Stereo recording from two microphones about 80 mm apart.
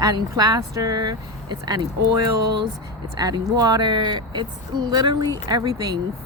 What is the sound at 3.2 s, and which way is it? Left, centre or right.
Speech, right.